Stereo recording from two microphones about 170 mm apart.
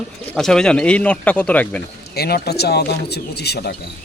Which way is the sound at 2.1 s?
65° left (ahead or behind).